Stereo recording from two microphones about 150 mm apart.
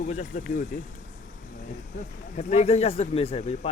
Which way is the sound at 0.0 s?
55° left (ahead or behind).